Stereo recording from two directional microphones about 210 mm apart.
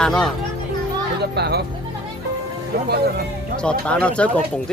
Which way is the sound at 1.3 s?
50° right (ahead or behind).